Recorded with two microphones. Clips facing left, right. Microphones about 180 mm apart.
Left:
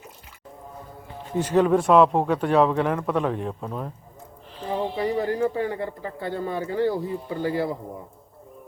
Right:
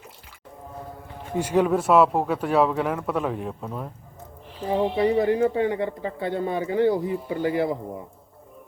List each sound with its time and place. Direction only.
1.4 s speech: 10° right (ahead or behind)
4.8 s speech: 25° right (ahead or behind)